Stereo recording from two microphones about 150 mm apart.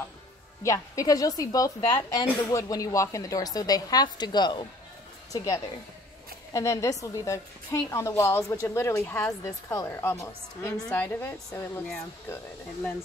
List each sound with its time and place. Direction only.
0.7 s a woman's voice: 25° left (ahead or behind)